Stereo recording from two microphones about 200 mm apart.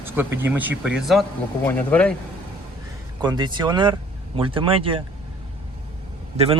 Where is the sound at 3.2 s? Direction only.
20° right (ahead or behind).